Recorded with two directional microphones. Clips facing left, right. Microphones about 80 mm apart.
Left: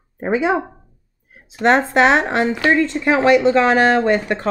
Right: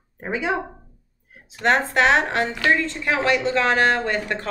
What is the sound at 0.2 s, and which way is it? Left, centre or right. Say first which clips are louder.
Speech: left 7 dB; left.